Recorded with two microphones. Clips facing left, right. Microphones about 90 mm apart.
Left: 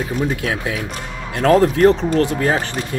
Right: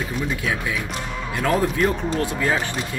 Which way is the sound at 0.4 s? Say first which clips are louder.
Left 3 dB; 55° left (ahead or behind).